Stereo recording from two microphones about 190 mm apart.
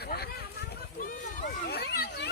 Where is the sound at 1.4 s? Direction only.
60° left (ahead or behind).